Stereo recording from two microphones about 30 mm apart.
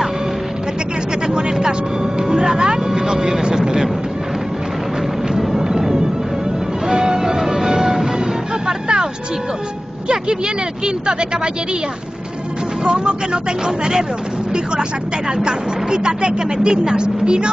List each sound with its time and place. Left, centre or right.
1.2 s music: right
2.9 s vehicle: centre
5.6 s music: centre
8.6 s music: right
10.0 s vehicle: right
12.8 s speech: right
15.3 s speech: right